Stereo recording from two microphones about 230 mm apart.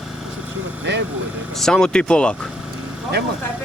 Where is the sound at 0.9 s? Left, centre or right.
Right.